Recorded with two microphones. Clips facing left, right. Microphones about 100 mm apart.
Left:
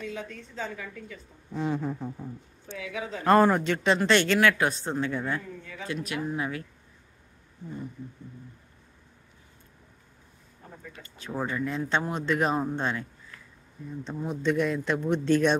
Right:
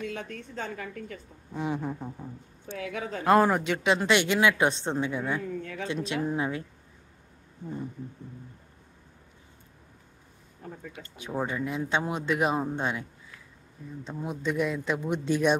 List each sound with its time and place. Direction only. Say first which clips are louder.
0.1 s a woman's voice: right 1 dB; 55° right (ahead or behind)
1.5 s speech: left 2 dB; 15° right (ahead or behind)
2.7 s a woman's voice: right 1 dB; 50° right (ahead or behind)
3.3 s speech: left 1 dB; 10° right (ahead or behind); by 5.1 s 25° right (ahead or behind)
5.1 s speech: even; 10° right (ahead or behind)
5.6 s speech: right 5 dB; 60° right (ahead or behind)
6.0 s speech: right 2 dB; 25° right (ahead or behind)
10.9 s speech: even; 15° right (ahead or behind)
14.0 s speech: left 3 dB; 5° right (ahead or behind)